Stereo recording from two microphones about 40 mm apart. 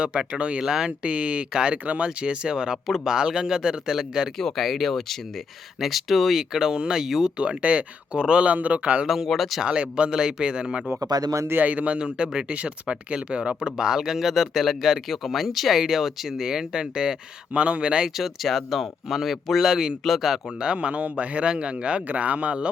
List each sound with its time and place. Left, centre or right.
0.0 s speech: right
0.6 s speech: centre
1.0 s speech: right
1.5 s speech: right
2.8 s speech: centre
4.4 s speech: centre
7.3 s speech: right
9.0 s speech: centre
9.6 s speech: right
11.6 s speech: right
11.9 s speech: right
17.5 s speech: right
18.2 s speech: centre
20.6 s speech: right